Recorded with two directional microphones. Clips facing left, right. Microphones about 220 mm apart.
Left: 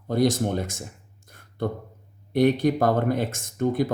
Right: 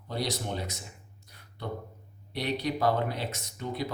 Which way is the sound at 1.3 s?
50° left (ahead or behind).